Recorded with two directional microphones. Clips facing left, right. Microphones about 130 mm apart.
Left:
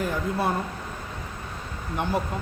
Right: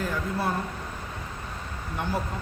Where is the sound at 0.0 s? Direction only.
15° left (ahead or behind).